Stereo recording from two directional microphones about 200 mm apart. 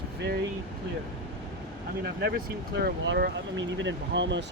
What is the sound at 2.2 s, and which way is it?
Speech, 50° right (ahead or behind).